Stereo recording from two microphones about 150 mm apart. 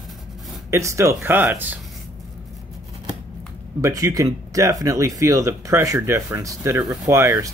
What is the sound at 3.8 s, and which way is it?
Speech, 20° right (ahead or behind).